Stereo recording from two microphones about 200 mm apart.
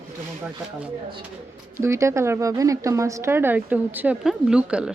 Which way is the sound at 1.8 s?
15° right (ahead or behind).